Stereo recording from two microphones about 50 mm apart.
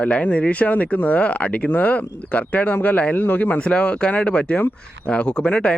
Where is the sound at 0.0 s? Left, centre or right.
Left.